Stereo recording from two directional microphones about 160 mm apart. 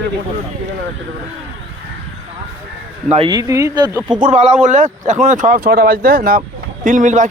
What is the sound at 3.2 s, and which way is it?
Speech, 20° right (ahead or behind).